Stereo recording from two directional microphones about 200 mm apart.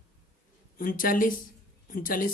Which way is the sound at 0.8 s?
45° left (ahead or behind).